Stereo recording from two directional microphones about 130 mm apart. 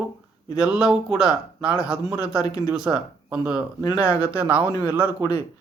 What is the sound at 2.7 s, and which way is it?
A man's voice, 10° right (ahead or behind).